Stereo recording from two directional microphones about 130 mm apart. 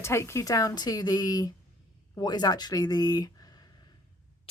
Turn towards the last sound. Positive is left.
turn(degrees=30)  # may be behind; listen again after turning